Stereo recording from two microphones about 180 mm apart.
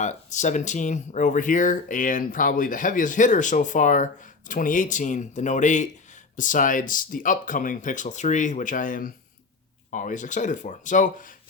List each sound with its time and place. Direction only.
0.0 s speech: 40° left (ahead or behind)